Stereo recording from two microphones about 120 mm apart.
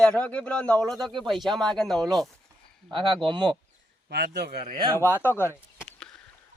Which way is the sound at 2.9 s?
40° right (ahead or behind).